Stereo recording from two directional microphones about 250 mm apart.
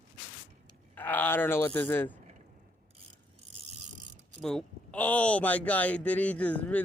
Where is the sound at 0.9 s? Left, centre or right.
Centre.